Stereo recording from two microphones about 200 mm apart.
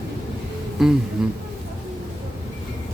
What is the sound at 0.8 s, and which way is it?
Music, centre (ahead or behind).